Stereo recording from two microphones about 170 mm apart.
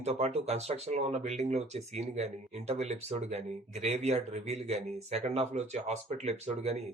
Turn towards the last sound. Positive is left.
turn(degrees=-40)  # may be behind; listen again after turning